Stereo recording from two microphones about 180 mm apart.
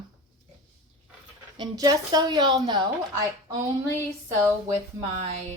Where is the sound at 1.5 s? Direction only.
25° right (ahead or behind).